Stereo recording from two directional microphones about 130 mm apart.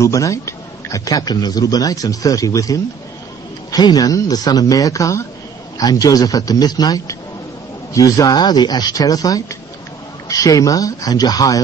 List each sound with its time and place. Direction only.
0.0 s speech: 25° left (ahead or behind)